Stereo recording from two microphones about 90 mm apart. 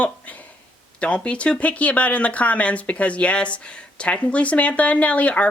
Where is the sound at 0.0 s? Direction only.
15° left (ahead or behind).